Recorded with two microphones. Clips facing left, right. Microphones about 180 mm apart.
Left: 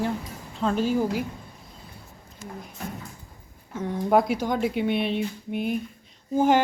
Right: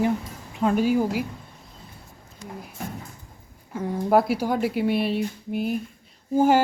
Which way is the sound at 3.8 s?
5° right (ahead or behind).